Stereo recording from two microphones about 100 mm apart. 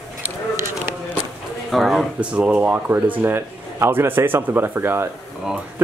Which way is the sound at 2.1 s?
10° right (ahead or behind).